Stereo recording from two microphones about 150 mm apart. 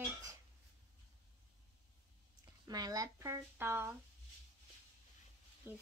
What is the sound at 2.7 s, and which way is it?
A child's voice, 25° right (ahead or behind).